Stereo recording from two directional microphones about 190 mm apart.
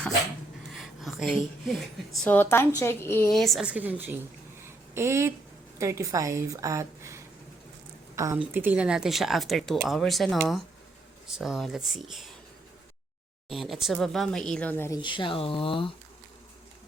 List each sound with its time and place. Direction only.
0.7 s a sound: centre (ahead or behind)
2.2 s speech: 10° left (ahead or behind)
3.3 s a woman's voice: centre (ahead or behind)
13.5 s speech: centre (ahead or behind); by 15.9 s 30° left (ahead or behind)